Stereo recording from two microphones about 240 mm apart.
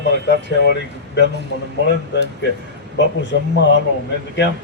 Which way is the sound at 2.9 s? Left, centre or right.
Left.